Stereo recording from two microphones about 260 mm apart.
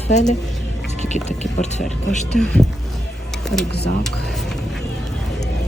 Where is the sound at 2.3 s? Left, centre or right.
Centre.